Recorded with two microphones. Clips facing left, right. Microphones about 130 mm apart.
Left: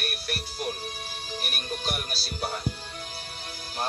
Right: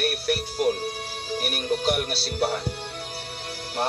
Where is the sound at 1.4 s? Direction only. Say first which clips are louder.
Right 10 dB; 55° right (ahead or behind).